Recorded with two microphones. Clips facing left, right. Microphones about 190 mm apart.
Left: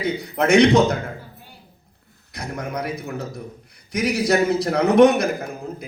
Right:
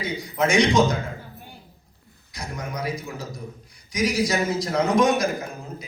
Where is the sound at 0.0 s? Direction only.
60° left (ahead or behind).